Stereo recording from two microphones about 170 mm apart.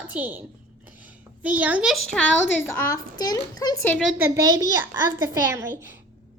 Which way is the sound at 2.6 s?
20° left (ahead or behind).